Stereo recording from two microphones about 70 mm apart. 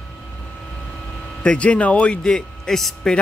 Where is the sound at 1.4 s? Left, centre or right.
Centre.